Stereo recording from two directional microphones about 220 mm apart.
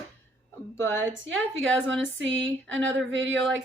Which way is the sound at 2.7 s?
60° right (ahead or behind).